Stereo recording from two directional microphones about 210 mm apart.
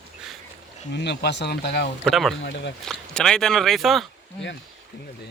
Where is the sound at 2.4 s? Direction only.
50° left (ahead or behind).